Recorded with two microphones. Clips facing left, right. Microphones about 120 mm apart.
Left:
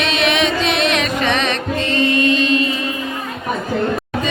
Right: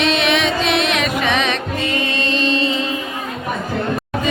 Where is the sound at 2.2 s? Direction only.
30° right (ahead or behind).